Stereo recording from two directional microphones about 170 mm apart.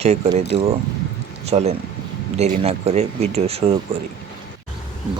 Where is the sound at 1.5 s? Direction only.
40° right (ahead or behind).